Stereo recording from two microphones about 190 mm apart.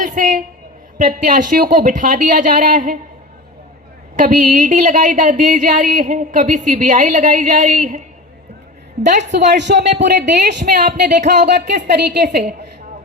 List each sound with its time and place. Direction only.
0.0 s a sound: 40° right (ahead or behind)
0.9 s speech: 45° right (ahead or behind)
4.2 s speech: 45° right (ahead or behind)
9.3 s speech: 65° right (ahead or behind)